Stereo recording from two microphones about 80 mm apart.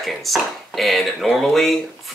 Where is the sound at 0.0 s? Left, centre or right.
Centre.